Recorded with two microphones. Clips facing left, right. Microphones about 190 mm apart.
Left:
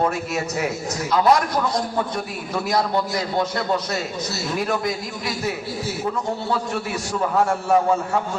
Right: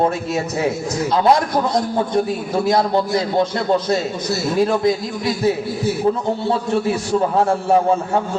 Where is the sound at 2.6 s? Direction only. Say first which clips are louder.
Right 4 dB; 30° right (ahead or behind).